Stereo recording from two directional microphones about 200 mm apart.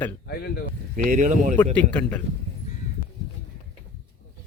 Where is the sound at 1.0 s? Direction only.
40° right (ahead or behind).